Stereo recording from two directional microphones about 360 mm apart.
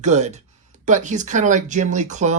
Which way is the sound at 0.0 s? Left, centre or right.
Centre.